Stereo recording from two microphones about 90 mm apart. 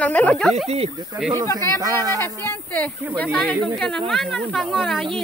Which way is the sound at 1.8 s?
45° right (ahead or behind).